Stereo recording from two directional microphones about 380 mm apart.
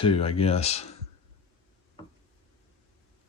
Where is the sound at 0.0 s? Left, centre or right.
Centre.